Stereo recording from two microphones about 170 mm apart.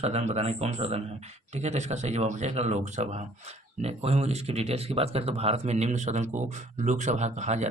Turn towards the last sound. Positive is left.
turn(degrees=-40)  # may be behind; listen again after turning